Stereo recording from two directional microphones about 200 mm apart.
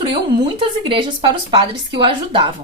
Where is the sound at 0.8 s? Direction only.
25° right (ahead or behind).